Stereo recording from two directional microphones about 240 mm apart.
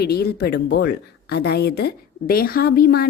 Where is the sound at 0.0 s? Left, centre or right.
Left.